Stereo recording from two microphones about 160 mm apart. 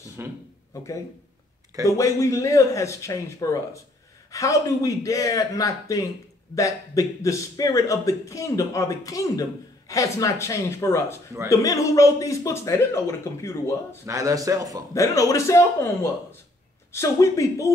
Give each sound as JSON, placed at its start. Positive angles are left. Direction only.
{"t": 0.2, "sound": "speech", "side_deg": -15}
{"t": 1.9, "sound": "a man's voice", "side_deg": 20}
{"t": 14.0, "sound": "speech", "side_deg": -20}
{"t": 15.0, "sound": "a man's voice", "side_deg": 20}